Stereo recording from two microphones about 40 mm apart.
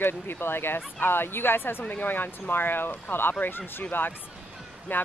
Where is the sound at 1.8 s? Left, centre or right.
Left.